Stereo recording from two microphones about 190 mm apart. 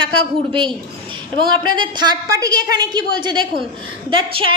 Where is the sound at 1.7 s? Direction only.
25° right (ahead or behind).